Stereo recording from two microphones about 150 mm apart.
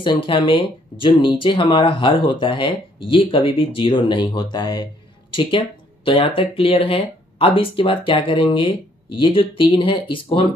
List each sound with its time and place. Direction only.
0.0 s speech: 35° left (ahead or behind)